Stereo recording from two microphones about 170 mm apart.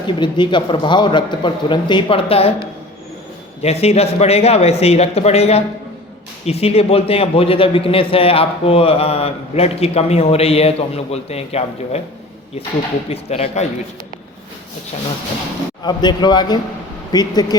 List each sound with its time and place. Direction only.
0.2 s a man's voice: 25° left (ahead or behind)
13.1 s a man's voice: 35° left (ahead or behind)
15.8 s a man's voice: 25° left (ahead or behind)